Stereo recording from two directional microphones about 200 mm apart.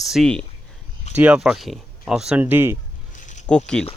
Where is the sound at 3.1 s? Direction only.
40° left (ahead or behind).